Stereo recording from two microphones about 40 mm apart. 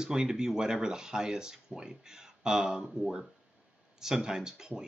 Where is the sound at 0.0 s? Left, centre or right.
Centre.